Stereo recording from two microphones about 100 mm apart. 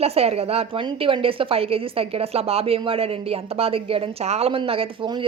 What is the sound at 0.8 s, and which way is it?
Speech, 60° right (ahead or behind).